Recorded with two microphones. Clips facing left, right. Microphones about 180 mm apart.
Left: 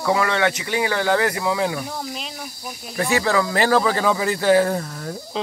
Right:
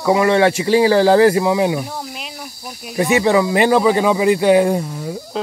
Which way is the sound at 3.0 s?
20° right (ahead or behind).